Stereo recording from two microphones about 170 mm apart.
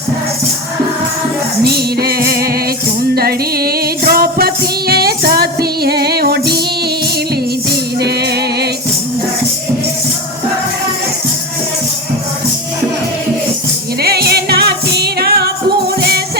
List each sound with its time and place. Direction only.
1.6 s music: 65° right (ahead or behind)
7.7 s music: 70° right (ahead or behind)
14.0 s music: 70° right (ahead or behind)